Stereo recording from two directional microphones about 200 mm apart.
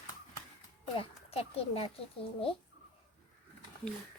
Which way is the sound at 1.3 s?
30° left (ahead or behind).